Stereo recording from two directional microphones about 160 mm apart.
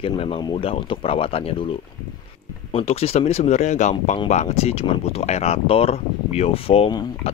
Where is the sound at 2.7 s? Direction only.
40° left (ahead or behind).